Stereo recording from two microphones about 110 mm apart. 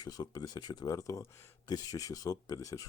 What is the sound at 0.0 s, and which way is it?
Speech, 35° left (ahead or behind).